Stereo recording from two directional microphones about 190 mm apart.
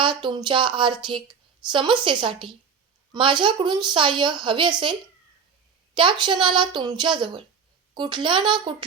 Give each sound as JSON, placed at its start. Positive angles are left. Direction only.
{"t": 0.0, "sound": "a woman's voice", "side_deg": -25}
{"t": 5.9, "sound": "a woman's voice", "side_deg": -25}